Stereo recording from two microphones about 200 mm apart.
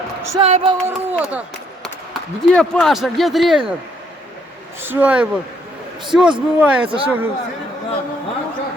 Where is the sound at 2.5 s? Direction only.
5° left (ahead or behind).